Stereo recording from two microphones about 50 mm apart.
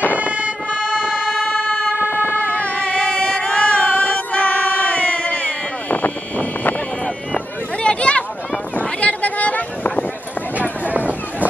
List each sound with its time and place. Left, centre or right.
0.0 s music: left
1.1 s vehicle: centre
2.0 s vehicle: left
2.6 s female singing: left
7.3 s a sound: left
10.6 s a sound: right